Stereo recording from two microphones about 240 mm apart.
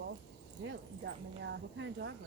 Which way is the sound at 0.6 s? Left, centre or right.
Right.